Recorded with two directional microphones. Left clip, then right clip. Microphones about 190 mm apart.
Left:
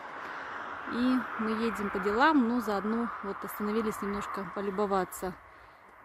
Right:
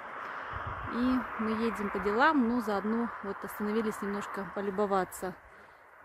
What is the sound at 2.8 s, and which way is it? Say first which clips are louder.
Speech: left 1 dB; 70° left (ahead or behind).